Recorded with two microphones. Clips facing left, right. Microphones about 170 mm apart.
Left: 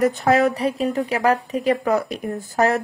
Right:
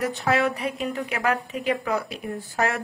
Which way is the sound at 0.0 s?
45° left (ahead or behind).